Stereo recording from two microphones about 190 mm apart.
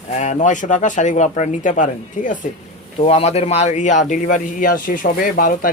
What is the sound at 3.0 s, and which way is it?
Speech, 30° left (ahead or behind).